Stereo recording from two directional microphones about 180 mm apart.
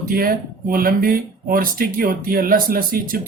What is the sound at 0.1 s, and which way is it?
Speech, 55° right (ahead or behind).